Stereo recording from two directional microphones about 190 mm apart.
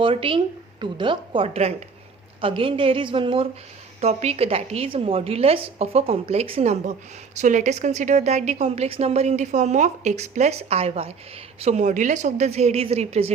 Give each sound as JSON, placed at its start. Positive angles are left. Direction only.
{"t": 0.0, "sound": "a woman's voice", "side_deg": -30}